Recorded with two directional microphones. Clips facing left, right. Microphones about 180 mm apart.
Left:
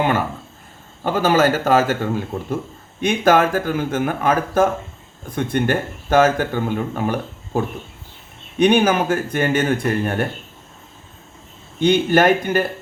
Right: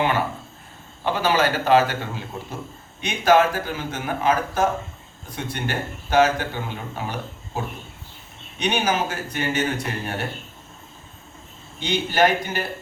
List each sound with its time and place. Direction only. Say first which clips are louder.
0.0 s speech: left 3 dB; 45° left (ahead or behind)
11.8 s speech: left 6 dB; 55° left (ahead or behind)